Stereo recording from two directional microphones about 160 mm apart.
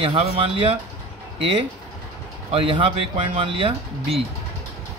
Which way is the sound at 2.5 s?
35° right (ahead or behind).